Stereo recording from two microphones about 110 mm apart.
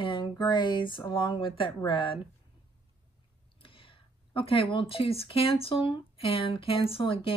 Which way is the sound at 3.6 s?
50° left (ahead or behind).